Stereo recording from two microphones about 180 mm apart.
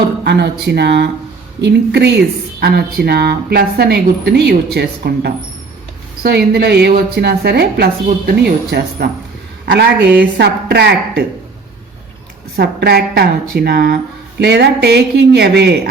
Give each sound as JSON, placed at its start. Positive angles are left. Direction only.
{"t": 0.6, "sound": "speech", "side_deg": -65}
{"t": 12.5, "sound": "speech", "side_deg": -60}